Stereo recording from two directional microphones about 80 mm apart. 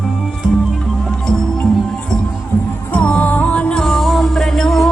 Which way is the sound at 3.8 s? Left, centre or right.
Centre.